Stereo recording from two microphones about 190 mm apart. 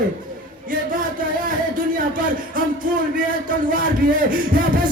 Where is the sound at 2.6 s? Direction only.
45° right (ahead or behind).